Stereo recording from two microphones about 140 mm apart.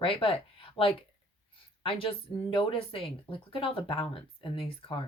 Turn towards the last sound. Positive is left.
turn(degrees=40)  # may be behind; listen again after turning